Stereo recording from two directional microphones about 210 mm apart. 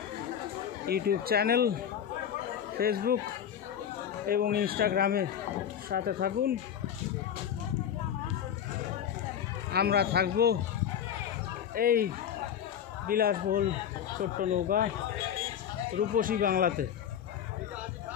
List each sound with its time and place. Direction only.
0.8 s speech: 50° right (ahead or behind)
2.8 s speech: 45° right (ahead or behind)
4.3 s speech: 45° right (ahead or behind)
9.7 s speech: 50° right (ahead or behind)
11.7 s speech: 45° right (ahead or behind)
16.2 s speech: 40° right (ahead or behind)